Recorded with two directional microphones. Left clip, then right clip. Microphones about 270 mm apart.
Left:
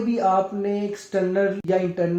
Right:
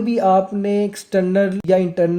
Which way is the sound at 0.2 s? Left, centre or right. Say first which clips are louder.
Right 5 dB; right.